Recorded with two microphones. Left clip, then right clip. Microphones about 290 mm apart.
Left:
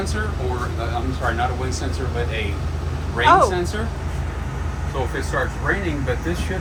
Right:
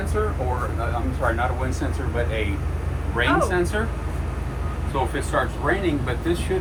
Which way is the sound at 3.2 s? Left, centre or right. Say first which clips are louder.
Left 6 dB; right.